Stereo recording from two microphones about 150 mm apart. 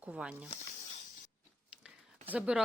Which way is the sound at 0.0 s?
5° right (ahead or behind).